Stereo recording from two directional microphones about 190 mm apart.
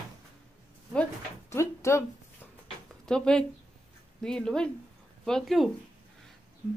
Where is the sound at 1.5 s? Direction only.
15° left (ahead or behind).